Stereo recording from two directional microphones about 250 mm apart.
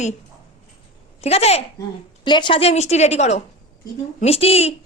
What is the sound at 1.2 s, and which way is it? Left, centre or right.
A man's voice, left.